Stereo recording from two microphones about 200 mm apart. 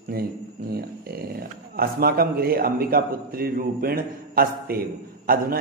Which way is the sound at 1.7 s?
50° right (ahead or behind).